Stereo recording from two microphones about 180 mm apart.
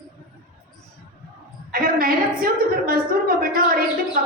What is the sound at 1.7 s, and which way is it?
A woman's voice, 55° right (ahead or behind).